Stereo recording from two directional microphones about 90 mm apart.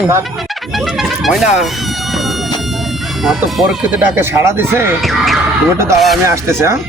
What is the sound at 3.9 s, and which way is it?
Speech, 20° right (ahead or behind).